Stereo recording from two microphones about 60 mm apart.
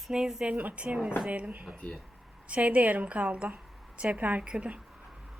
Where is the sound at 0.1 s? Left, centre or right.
Centre.